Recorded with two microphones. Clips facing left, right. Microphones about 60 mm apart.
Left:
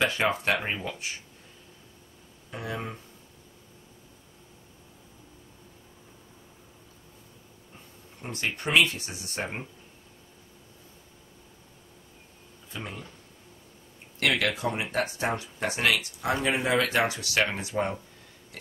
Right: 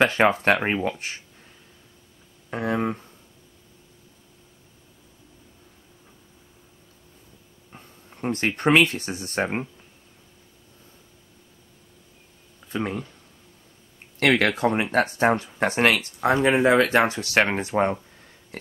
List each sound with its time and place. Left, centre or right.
0.0 s speech: right
2.5 s speech: right
8.2 s speech: right
12.7 s speech: right
14.2 s speech: right